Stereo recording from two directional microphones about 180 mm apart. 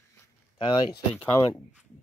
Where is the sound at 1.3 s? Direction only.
15° left (ahead or behind).